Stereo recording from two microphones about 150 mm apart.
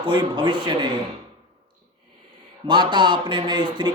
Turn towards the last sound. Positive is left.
turn(degrees=-30)  # may be behind; listen again after turning